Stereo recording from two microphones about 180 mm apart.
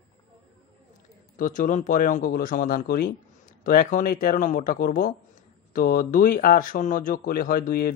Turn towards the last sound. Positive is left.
turn(degrees=55)  # may be behind; listen again after turning